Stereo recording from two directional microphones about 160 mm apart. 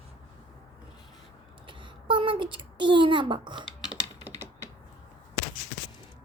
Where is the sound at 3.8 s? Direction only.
5° right (ahead or behind).